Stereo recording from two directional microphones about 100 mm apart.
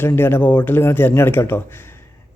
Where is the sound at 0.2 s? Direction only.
20° left (ahead or behind).